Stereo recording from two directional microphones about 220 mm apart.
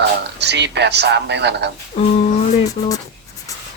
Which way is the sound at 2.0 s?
30° left (ahead or behind).